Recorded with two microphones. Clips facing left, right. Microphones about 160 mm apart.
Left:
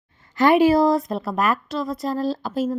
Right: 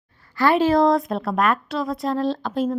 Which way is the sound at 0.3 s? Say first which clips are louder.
Left 2 dB; 15° left (ahead or behind).